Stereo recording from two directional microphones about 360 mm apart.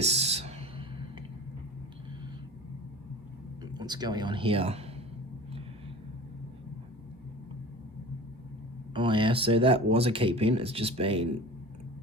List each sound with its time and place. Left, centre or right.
0.0 s a sound: centre
3.6 s speech: centre
9.0 s speech: centre